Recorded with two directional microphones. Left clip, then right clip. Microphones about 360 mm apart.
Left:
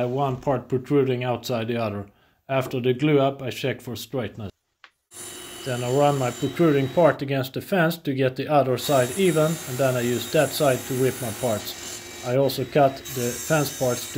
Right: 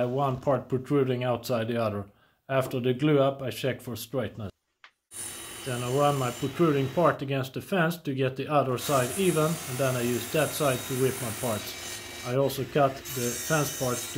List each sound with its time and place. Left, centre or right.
0.0 s speech: centre
5.7 s speech: centre
12.3 s speech: centre